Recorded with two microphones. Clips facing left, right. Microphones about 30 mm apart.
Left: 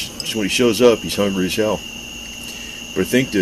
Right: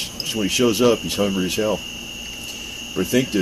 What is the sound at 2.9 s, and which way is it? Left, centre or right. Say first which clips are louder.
Speech: left 3 dB; left.